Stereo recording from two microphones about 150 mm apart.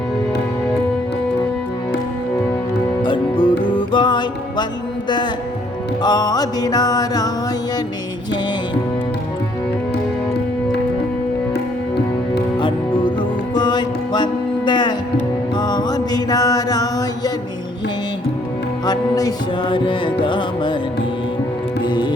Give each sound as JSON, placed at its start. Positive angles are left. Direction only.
{"t": 3.0, "sound": "music", "side_deg": 35}
{"t": 12.5, "sound": "music", "side_deg": 35}
{"t": 15.5, "sound": "mantra", "side_deg": 25}
{"t": 18.9, "sound": "music", "side_deg": 25}
{"t": 21.8, "sound": "music", "side_deg": 30}